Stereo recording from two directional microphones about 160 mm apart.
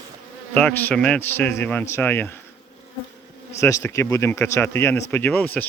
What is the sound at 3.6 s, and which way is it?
A man's voice, 20° left (ahead or behind).